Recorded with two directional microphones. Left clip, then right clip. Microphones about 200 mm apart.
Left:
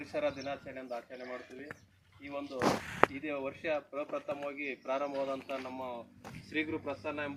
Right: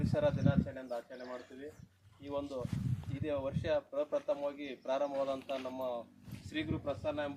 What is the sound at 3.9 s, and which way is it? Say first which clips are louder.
Speech: right 3 dB; 35° right (ahead or behind).